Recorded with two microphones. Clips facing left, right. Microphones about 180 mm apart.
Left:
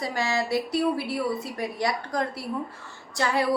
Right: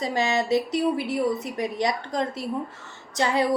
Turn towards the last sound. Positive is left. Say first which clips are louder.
# right 2 dB
turn(degrees=-20)  # may be behind; listen again after turning